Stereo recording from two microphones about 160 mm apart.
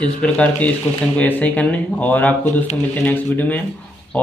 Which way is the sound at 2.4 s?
45° left (ahead or behind).